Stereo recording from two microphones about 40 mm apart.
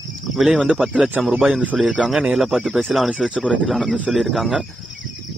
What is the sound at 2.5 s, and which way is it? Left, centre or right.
Speech, right.